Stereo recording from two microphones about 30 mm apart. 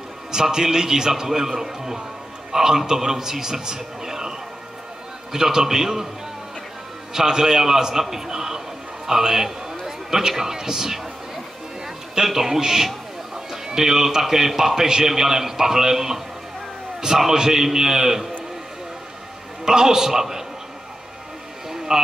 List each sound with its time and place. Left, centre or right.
0.3 s a man's voice: right
7.2 s a man's voice: centre
12.3 s a man's voice: centre
17.3 s a man's voice: centre
19.6 s a man's voice: right
21.6 s a sound: centre